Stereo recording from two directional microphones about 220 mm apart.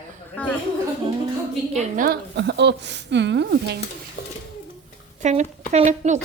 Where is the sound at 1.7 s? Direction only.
40° right (ahead or behind).